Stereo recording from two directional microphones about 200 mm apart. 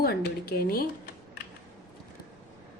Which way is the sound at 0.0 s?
50° left (ahead or behind).